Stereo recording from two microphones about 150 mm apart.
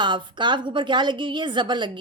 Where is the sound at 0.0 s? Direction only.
30° right (ahead or behind).